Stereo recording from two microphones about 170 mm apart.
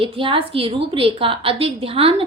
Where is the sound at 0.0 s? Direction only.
30° right (ahead or behind).